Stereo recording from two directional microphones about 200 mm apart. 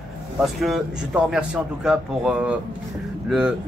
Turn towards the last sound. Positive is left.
turn(degrees=-5)  # may be behind; listen again after turning